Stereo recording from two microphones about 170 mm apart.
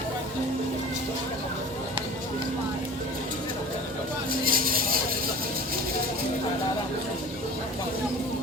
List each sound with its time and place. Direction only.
4.3 s vehicle: 60° right (ahead or behind)